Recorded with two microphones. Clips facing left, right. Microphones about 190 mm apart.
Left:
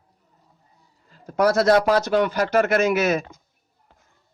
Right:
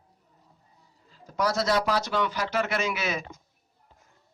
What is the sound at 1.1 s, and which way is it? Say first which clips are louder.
Speech: left 8 dB; 55° left (ahead or behind).